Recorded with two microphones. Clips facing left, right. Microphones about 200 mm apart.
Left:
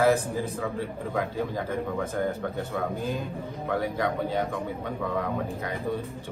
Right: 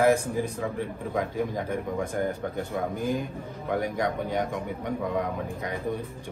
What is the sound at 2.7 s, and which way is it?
A man's voice, 15° right (ahead or behind).